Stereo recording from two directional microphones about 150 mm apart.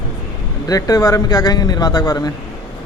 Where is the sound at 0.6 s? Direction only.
25° left (ahead or behind).